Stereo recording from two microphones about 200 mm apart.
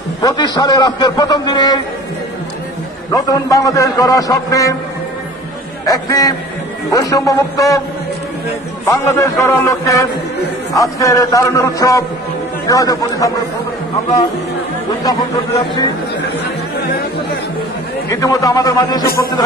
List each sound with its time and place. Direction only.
0.2 s a man's voice: 20° left (ahead or behind)
3.1 s a man's voice: 15° left (ahead or behind)
5.9 s a man's voice: 20° left (ahead or behind)
8.8 s a man's voice: 15° left (ahead or behind)
15.0 s a man's voice: 20° left (ahead or behind)
18.1 s a man's voice: 15° left (ahead or behind)